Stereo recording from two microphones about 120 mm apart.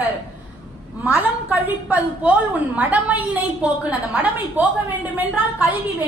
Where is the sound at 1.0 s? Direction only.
10° right (ahead or behind).